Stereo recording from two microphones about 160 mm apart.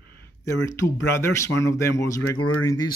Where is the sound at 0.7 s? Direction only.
15° left (ahead or behind).